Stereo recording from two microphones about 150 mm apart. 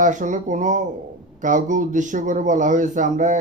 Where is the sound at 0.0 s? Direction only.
55° right (ahead or behind).